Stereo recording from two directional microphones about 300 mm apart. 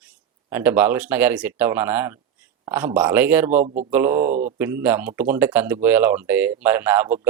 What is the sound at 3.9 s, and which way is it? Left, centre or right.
Speech, centre.